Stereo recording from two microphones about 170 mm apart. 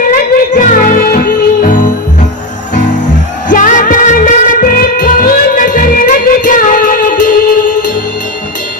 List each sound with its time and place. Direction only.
0.0 s music: 50° left (ahead or behind)
3.5 s music: 50° left (ahead or behind)